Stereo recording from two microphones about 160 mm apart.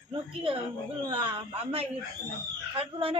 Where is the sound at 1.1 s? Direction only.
30° right (ahead or behind).